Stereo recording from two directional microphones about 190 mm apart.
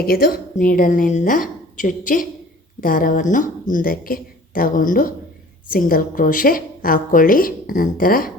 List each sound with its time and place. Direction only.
0.0 s a woman's voice: 50° left (ahead or behind)